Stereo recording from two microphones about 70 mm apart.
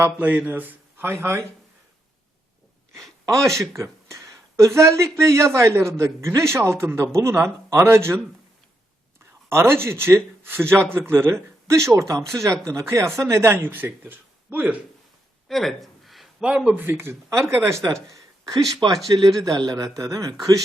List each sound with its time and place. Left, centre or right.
0.0 s a man's voice: right
3.2 s a man's voice: right
9.5 s a man's voice: right
13.6 s speech: right
15.4 s a sound: centre
16.4 s a man's voice: centre; by 18.2 s right
19.1 s a man's voice: right
20.0 s speech: right